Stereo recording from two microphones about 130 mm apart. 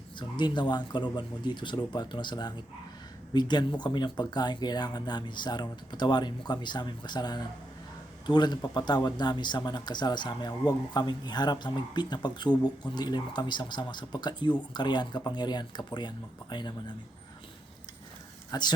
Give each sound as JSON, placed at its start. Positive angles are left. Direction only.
{"t": 0.2, "sound": "speech", "side_deg": 35}
{"t": 18.5, "sound": "speech", "side_deg": 30}